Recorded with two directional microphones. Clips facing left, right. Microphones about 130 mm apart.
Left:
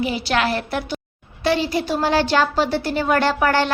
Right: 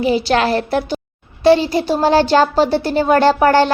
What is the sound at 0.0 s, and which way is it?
A woman's voice, 35° right (ahead or behind).